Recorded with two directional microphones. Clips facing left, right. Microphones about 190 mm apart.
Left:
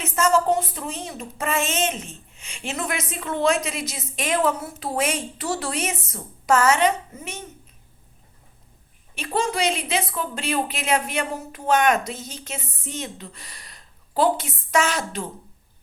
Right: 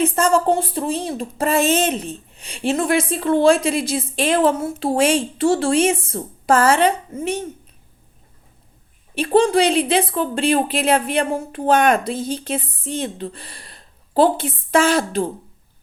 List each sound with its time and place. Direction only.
0.0 s a woman's voice: 30° right (ahead or behind)
9.1 s a woman's voice: 30° right (ahead or behind)